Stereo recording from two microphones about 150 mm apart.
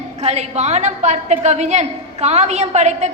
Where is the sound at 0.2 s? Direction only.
45° right (ahead or behind).